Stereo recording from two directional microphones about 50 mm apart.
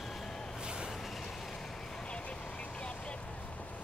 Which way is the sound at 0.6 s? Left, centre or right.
Centre.